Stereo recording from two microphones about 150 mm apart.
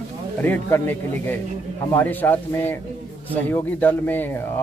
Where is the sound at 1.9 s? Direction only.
10° left (ahead or behind).